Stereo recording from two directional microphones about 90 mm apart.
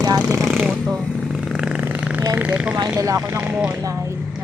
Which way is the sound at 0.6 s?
10° right (ahead or behind).